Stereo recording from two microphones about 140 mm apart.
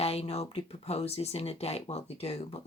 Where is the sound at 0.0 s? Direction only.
45° left (ahead or behind).